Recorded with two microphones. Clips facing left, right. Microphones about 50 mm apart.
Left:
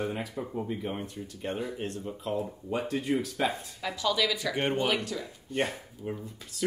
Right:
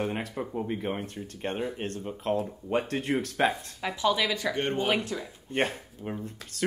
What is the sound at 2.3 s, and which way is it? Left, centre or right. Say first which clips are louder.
Speech: right 3 dB; right.